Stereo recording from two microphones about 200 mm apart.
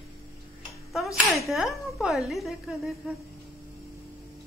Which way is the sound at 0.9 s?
Centre (ahead or behind).